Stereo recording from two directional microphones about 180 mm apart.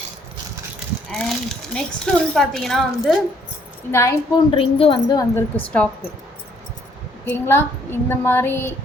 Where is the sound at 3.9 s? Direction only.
15° left (ahead or behind).